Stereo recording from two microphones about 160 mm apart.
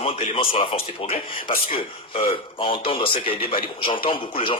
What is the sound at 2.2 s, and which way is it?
A man's voice, 35° left (ahead or behind).